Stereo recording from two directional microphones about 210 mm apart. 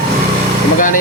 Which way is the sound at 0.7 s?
40° left (ahead or behind).